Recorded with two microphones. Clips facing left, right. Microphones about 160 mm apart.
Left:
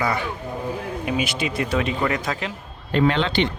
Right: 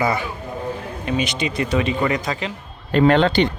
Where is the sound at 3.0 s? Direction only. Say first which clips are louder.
Right 5 dB; 50° right (ahead or behind).